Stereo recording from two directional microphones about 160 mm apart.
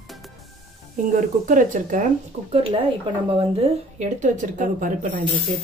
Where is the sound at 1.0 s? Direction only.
55° right (ahead or behind).